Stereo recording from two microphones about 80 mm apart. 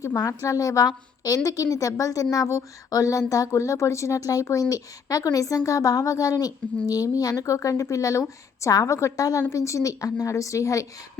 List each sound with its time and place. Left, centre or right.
0.2 s a woman's voice: left